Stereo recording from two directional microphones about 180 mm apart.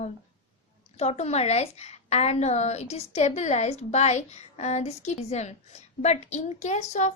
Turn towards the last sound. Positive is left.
turn(degrees=40)  # may be behind; listen again after turning